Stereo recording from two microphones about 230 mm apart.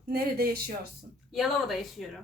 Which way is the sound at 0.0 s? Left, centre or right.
Right.